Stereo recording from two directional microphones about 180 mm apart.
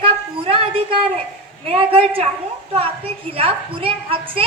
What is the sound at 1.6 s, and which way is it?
A woman's voice, 30° right (ahead or behind).